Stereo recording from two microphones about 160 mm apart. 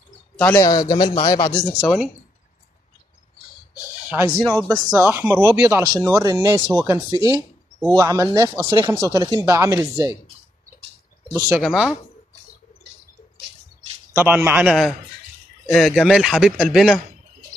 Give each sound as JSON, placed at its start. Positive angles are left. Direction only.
{"t": 0.6, "sound": "speech", "side_deg": 25}
{"t": 1.5, "sound": "speech", "side_deg": 10}
{"t": 3.8, "sound": "speech", "side_deg": -15}
{"t": 4.5, "sound": "speech", "side_deg": 10}
{"t": 4.9, "sound": "speech", "side_deg": -15}
{"t": 11.4, "sound": "speech", "side_deg": -5}
{"t": 14.1, "sound": "speech", "side_deg": -10}